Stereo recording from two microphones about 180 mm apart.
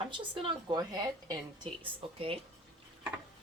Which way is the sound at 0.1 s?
25° right (ahead or behind).